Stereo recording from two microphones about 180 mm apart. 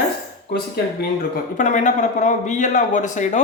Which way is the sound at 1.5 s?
45° left (ahead or behind).